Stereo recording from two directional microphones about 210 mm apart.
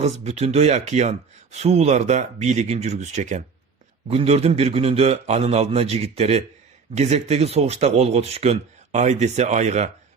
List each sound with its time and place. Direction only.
0.0 s a man's voice: 30° right (ahead or behind)